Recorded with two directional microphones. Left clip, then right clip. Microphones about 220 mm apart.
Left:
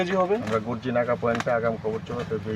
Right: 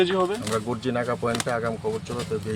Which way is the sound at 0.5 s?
20° right (ahead or behind).